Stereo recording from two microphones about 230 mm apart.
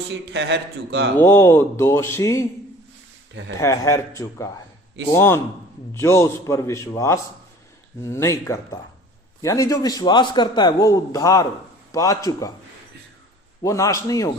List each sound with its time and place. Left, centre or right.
0.3 s a man's voice: right
1.2 s a man's voice: centre
3.6 s a man's voice: centre
13.6 s a man's voice: centre